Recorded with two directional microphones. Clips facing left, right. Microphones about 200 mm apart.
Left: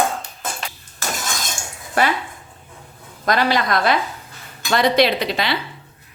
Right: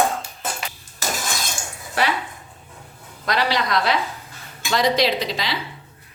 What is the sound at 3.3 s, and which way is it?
A woman's voice, 50° left (ahead or behind).